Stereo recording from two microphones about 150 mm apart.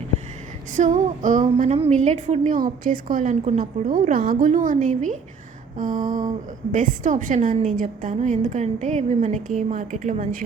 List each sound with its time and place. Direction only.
0.8 s a woman's voice: 55° right (ahead or behind)
2.6 s a woman's voice: 65° right (ahead or behind)